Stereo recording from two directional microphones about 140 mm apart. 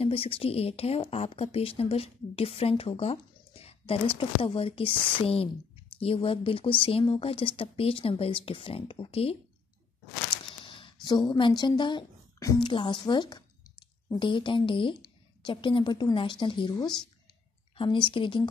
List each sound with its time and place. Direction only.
0.0 s a woman's voice: 40° left (ahead or behind)
10.6 s a sound: 40° left (ahead or behind)
11.1 s speech: 30° left (ahead or behind)